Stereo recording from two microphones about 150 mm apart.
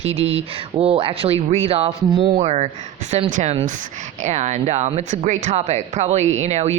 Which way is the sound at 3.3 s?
60° right (ahead or behind).